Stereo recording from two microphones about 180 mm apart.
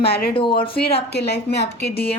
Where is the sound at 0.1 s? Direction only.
60° left (ahead or behind).